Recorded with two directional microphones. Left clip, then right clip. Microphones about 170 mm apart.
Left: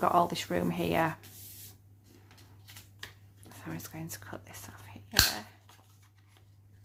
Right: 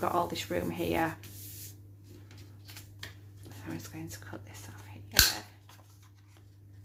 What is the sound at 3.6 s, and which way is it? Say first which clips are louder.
Speech: even; 30° left (ahead or behind).